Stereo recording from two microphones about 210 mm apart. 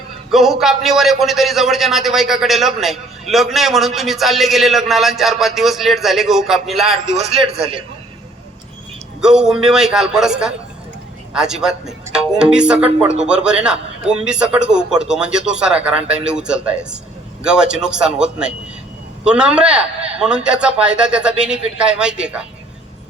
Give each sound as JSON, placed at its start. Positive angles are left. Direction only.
{"t": 0.3, "sound": "a man's voice", "side_deg": 0}
{"t": 7.2, "sound": "a man's voice", "side_deg": -30}
{"t": 9.2, "sound": "a man's voice", "side_deg": -5}